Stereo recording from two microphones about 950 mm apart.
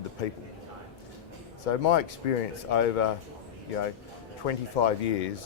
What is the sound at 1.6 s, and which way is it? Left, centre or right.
Speech, left.